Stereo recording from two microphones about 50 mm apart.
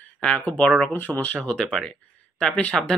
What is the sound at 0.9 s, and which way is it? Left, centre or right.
Speech, left.